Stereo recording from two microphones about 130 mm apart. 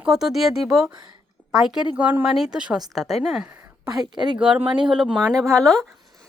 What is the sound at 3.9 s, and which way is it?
Speech, 35° right (ahead or behind).